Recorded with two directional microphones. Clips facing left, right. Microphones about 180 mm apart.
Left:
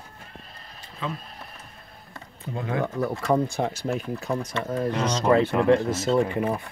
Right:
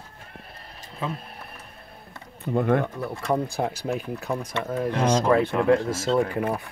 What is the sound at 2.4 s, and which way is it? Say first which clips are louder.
Speech: right 9 dB; 60° right (ahead or behind).